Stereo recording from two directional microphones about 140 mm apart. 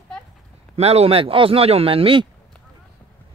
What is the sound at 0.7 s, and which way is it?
Speech, 45° right (ahead or behind).